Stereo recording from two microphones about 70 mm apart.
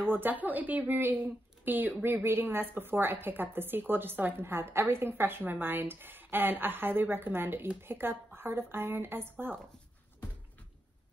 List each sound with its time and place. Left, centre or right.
0.1 s a woman's voice: right